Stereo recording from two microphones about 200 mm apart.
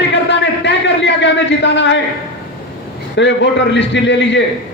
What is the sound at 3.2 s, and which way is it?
A man's voice, 60° left (ahead or behind).